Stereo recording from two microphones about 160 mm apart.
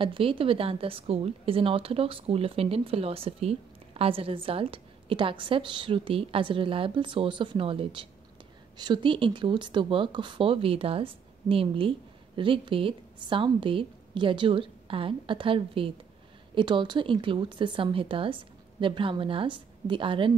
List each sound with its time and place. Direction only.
0.0 s a woman's voice: 35° right (ahead or behind)